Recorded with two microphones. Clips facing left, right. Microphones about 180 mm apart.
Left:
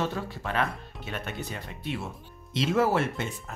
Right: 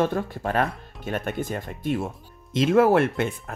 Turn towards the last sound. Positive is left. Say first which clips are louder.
# right 7 dB
turn(degrees=-55)  # may be behind; listen again after turning